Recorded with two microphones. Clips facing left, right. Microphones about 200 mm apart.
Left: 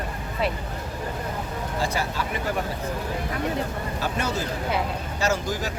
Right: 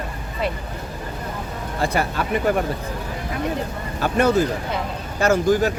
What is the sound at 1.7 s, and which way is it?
Speech, 60° right (ahead or behind).